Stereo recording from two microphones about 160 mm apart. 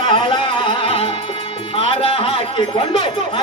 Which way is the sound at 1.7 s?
35° left (ahead or behind).